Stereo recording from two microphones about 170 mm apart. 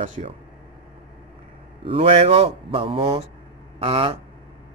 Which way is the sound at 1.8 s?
35° right (ahead or behind).